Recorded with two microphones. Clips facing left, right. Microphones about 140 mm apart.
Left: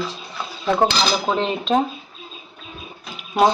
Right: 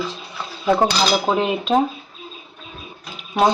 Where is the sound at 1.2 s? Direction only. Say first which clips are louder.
Right 2 dB; 5° right (ahead or behind).